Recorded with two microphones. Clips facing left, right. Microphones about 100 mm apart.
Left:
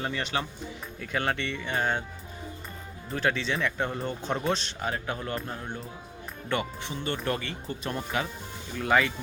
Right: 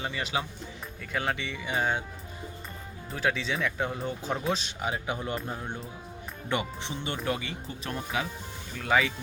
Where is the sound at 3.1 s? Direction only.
Centre (ahead or behind).